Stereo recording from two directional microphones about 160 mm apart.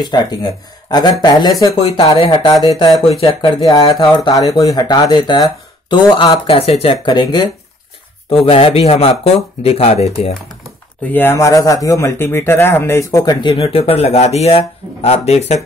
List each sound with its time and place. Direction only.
0.0 s speech: 25° left (ahead or behind)
1.8 s speech: 35° left (ahead or behind)
2.6 s speech: 25° left (ahead or behind)
3.1 s speech: 35° left (ahead or behind)
3.9 s speech: 25° left (ahead or behind); by 10.1 s 40° left (ahead or behind)
11.1 s speech: 15° left (ahead or behind); by 15.6 s 40° left (ahead or behind)